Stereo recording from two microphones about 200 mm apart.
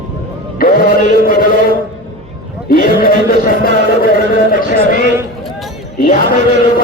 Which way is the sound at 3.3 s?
45° left (ahead or behind).